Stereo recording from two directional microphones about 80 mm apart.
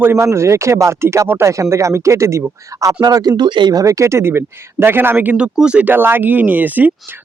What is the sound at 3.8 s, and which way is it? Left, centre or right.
Speech, right.